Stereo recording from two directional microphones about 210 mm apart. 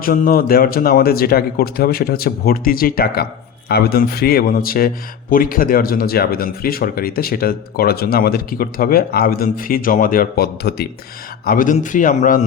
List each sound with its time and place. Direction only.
0.0 s a man's voice: 45° left (ahead or behind)